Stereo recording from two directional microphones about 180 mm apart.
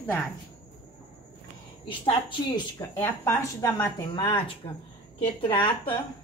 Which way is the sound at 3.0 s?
15° left (ahead or behind).